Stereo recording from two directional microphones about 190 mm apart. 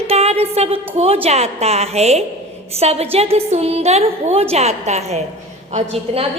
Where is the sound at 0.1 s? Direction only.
35° right (ahead or behind).